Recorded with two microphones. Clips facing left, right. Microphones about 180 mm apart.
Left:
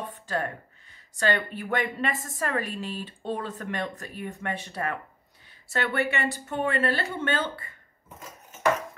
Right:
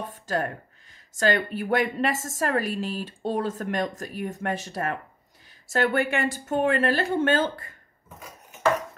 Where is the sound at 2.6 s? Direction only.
90° right.